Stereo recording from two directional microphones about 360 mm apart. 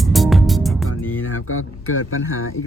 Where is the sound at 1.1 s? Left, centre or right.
Left.